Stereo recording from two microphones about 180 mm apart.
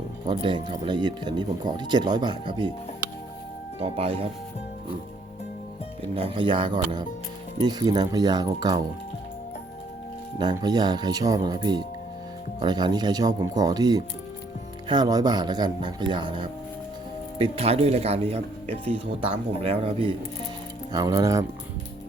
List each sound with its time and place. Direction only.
0.3 s speech: 25° right (ahead or behind)
3.8 s speech: 30° right (ahead or behind)
6.1 s speech: 30° right (ahead or behind)
10.3 s speech: 25° right (ahead or behind)